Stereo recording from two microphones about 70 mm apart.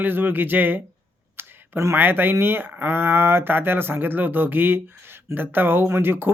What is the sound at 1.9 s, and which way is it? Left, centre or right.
Speech, right.